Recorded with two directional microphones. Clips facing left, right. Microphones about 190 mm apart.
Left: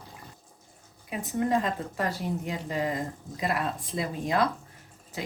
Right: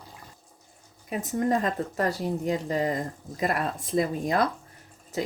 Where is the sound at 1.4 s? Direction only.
45° right (ahead or behind).